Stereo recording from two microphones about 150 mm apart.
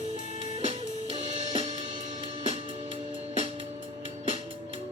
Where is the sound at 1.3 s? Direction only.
45° right (ahead or behind).